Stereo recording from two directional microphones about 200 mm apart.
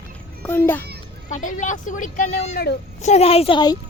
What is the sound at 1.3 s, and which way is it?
A woman's voice, 40° left (ahead or behind).